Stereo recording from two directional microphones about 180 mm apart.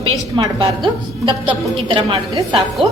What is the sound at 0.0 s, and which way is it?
A woman's voice, 25° right (ahead or behind).